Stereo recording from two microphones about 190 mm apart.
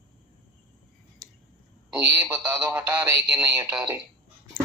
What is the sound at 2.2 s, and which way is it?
Speech, 10° right (ahead or behind).